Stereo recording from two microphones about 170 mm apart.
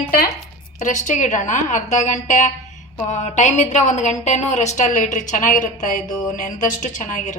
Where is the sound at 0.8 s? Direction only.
45° left (ahead or behind).